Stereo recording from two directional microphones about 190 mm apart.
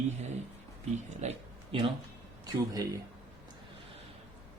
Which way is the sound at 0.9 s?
35° right (ahead or behind).